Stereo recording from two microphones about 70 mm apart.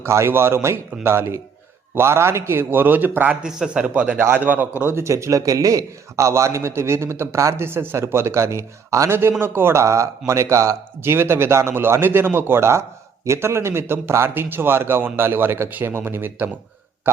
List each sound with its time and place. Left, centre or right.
0.0 s a man's voice: right
3.4 s a man's voice: centre; by 5.0 s right
5.0 s a man's voice: right
9.4 s a man's voice: right